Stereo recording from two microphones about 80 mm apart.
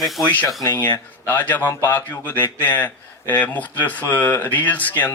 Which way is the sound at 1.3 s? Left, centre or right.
Left.